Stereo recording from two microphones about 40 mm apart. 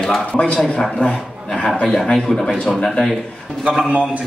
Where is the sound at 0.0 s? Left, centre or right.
Centre.